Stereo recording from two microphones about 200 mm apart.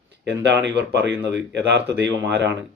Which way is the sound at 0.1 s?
60° right (ahead or behind).